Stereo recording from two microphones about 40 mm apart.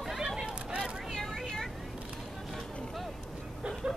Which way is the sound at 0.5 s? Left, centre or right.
Right.